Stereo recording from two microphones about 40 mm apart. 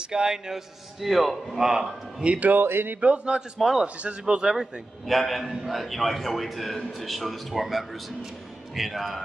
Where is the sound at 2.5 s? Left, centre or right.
Right.